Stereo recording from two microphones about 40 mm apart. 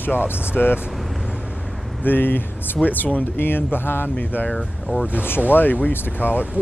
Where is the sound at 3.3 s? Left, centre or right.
Left.